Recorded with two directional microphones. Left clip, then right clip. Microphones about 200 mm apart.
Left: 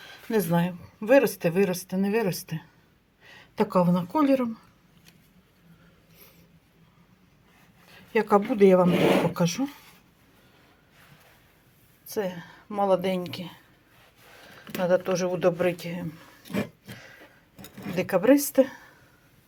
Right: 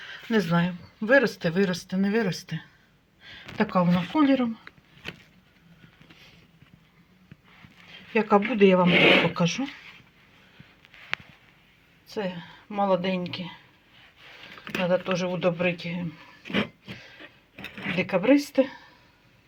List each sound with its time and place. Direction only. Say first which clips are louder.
0.3 s speech: even; 15° left (ahead or behind)
7.9 s a sound: even; 15° left (ahead or behind)
8.5 s speech: even; 15° left (ahead or behind)
12.0 s speech: left 2 dB; 10° left (ahead or behind)
17.6 s speech: right 2 dB; 15° left (ahead or behind)